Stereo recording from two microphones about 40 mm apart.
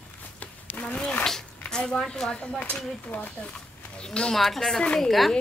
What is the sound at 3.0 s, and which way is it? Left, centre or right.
Speech, left.